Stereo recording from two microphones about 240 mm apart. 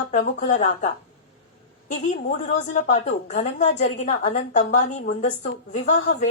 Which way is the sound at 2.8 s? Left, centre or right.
Left.